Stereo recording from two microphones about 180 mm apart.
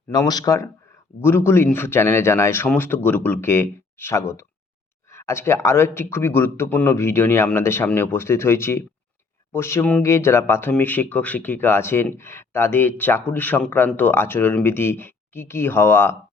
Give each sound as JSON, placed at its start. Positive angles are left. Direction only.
{"t": 0.1, "sound": "speech", "side_deg": 20}